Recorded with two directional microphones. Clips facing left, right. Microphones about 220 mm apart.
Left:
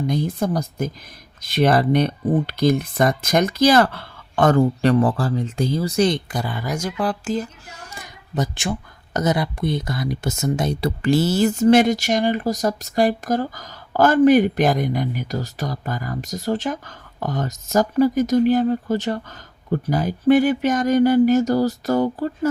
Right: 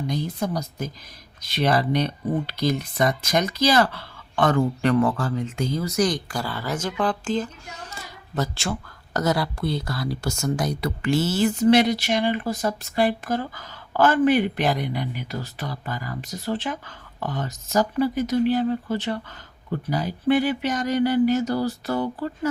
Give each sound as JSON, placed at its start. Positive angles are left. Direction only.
{"t": 0.1, "sound": "speech", "side_deg": 50}